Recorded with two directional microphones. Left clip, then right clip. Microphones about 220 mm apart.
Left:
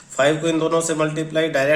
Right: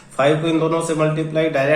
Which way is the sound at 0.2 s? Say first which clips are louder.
Right 1 dB; 35° left (ahead or behind).